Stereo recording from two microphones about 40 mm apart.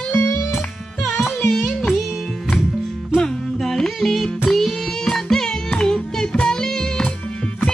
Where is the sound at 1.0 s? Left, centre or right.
Centre.